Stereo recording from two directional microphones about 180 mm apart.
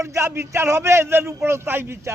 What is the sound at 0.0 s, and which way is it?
Speech, 15° right (ahead or behind).